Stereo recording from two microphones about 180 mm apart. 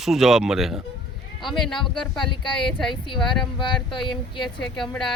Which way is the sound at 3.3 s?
25° left (ahead or behind).